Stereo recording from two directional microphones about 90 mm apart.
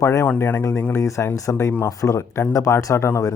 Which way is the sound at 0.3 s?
20° left (ahead or behind).